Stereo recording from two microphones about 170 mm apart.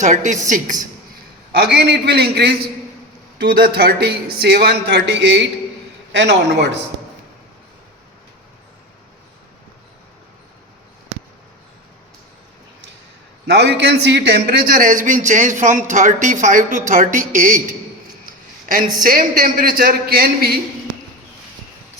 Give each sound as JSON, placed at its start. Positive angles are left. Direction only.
{"t": 0.0, "sound": "a man's voice", "side_deg": -45}
{"t": 1.5, "sound": "speech", "side_deg": -75}
{"t": 3.6, "sound": "a man's voice", "side_deg": -60}
{"t": 13.5, "sound": "a man's voice", "side_deg": -85}
{"t": 18.3, "sound": "a sound", "side_deg": -50}
{"t": 19.0, "sound": "a man's voice", "side_deg": -55}